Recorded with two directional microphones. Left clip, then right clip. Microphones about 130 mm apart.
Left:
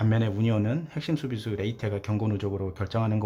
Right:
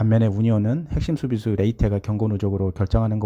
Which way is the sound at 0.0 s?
50° right (ahead or behind).